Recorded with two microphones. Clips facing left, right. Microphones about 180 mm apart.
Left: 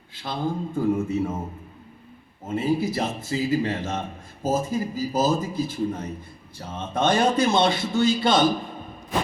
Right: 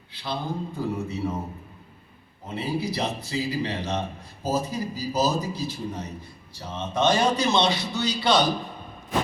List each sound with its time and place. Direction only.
0.1 s a man's voice: 45° left (ahead or behind)
2.5 s a man's voice: 50° left (ahead or behind)